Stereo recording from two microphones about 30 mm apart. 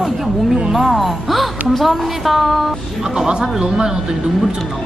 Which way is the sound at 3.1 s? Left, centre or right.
Centre.